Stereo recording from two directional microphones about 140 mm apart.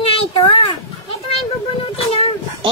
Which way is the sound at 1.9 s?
45° left (ahead or behind).